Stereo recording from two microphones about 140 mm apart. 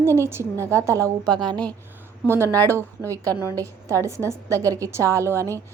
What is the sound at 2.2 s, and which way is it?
Speech, 15° right (ahead or behind).